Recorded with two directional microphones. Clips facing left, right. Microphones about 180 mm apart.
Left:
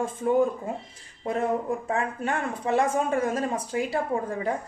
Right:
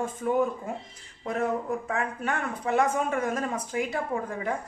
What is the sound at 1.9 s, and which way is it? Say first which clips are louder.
A woman's voice: left 2 dB; 30° left (ahead or behind).